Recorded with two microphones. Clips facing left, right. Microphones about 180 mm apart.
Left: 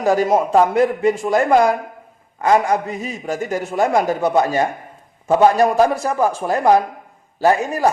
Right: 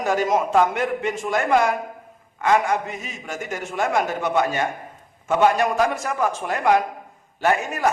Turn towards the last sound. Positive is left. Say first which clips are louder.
# left 5 dB
turn(degrees=35)  # may be behind; listen again after turning